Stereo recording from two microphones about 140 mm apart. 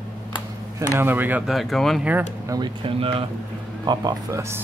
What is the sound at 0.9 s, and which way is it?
Speech, 15° right (ahead or behind).